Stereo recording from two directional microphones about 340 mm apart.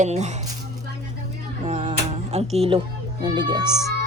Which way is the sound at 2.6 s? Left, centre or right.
Centre.